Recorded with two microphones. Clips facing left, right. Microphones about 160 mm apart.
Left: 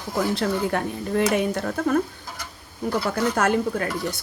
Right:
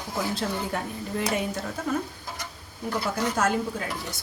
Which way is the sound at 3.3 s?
60° left (ahead or behind).